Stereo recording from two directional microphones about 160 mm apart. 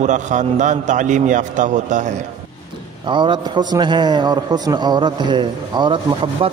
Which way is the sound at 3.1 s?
30° right (ahead or behind).